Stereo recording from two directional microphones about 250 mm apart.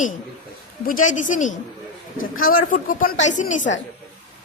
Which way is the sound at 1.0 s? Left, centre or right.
Left.